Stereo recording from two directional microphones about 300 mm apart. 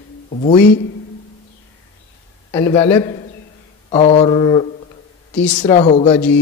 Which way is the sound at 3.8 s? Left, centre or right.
Centre.